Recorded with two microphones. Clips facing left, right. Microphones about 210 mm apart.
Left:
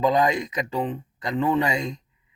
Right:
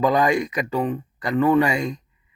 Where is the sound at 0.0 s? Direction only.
20° left (ahead or behind).